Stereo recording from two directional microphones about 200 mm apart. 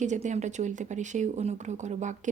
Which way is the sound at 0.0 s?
35° right (ahead or behind).